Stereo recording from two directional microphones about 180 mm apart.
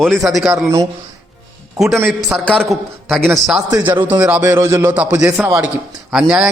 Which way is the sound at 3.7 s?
10° right (ahead or behind).